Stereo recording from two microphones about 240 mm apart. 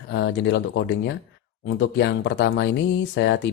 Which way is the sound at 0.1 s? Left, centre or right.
Left.